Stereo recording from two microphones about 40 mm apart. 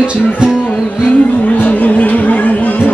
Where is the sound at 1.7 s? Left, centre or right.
Left.